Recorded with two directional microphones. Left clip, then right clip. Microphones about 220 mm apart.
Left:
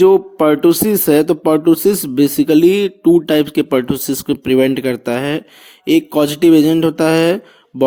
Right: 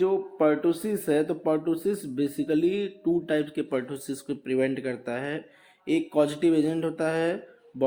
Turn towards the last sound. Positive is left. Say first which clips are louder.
# left 14 dB
turn(degrees=45)  # may be behind; listen again after turning